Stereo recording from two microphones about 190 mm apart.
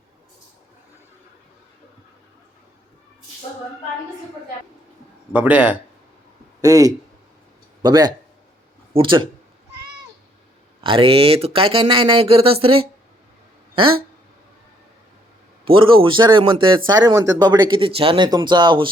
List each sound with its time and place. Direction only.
5.3 s speech: 5° right (ahead or behind)
6.6 s speech: 20° right (ahead or behind)
10.8 s speech: 30° right (ahead or behind)
15.6 s speech: 30° right (ahead or behind)